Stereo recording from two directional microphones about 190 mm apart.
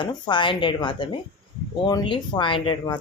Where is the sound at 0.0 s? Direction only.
25° left (ahead or behind).